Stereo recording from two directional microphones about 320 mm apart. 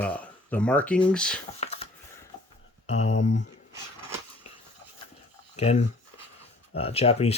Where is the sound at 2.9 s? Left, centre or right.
Left.